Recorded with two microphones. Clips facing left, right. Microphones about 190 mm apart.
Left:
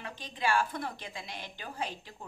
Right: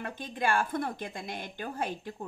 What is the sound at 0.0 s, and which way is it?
A woman's voice, 50° right (ahead or behind).